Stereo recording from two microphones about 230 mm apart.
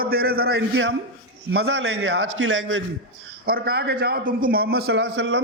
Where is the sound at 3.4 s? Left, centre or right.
Right.